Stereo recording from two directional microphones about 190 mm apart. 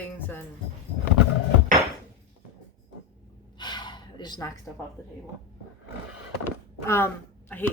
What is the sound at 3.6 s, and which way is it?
Gasp, 25° left (ahead or behind).